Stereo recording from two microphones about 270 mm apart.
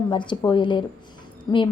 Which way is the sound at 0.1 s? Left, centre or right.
Centre.